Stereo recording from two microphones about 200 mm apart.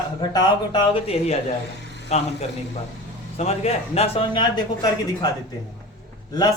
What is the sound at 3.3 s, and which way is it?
Speech, 30° left (ahead or behind).